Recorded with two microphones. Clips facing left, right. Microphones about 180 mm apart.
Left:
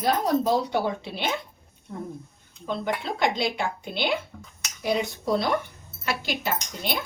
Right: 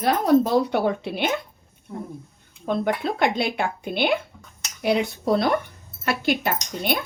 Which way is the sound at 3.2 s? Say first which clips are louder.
Right 1 dB; 55° right (ahead or behind).